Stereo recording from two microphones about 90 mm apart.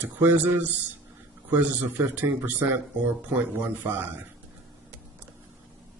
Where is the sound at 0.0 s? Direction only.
20° right (ahead or behind).